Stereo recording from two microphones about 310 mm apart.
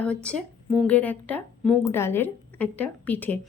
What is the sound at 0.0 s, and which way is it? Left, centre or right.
Speech, centre.